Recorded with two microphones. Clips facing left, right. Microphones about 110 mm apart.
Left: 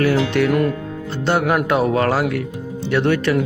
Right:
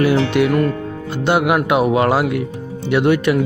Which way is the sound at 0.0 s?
15° right (ahead or behind).